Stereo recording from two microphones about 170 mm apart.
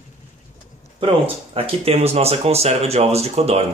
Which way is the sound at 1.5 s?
35° right (ahead or behind).